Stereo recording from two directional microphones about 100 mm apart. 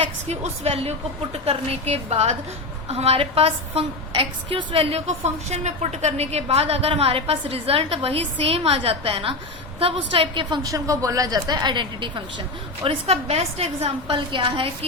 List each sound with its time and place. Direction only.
0.0 s a woman's voice: 90° right; by 10.6 s 55° right (ahead or behind)
10.6 s a woman's voice: 35° right (ahead or behind); by 12.2 s 50° right (ahead or behind)
12.8 s a woman's voice: 75° right (ahead or behind)
14.2 s a woman's voice: 55° right (ahead or behind)